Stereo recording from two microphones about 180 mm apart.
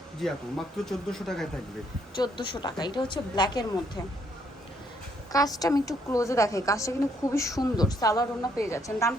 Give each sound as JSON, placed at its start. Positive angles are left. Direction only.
{"t": 0.2, "sound": "speech", "side_deg": 0}
{"t": 2.1, "sound": "a woman's voice", "side_deg": 25}
{"t": 5.3, "sound": "a woman's voice", "side_deg": 20}